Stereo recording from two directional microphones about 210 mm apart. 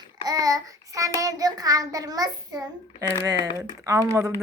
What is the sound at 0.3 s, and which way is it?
Child singing, 15° right (ahead or behind).